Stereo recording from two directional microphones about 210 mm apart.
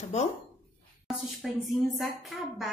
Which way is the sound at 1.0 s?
Centre (ahead or behind).